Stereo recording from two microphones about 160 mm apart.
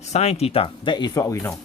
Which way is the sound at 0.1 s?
40° left (ahead or behind).